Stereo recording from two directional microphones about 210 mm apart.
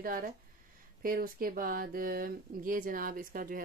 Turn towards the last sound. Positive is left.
turn(degrees=-40)  # may be behind; listen again after turning